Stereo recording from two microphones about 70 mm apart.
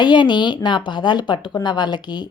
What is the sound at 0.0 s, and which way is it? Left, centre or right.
A woman's voice, left.